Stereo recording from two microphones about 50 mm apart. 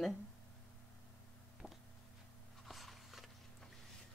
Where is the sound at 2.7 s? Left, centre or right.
Centre.